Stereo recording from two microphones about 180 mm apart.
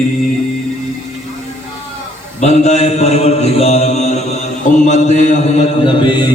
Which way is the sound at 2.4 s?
40° left (ahead or behind).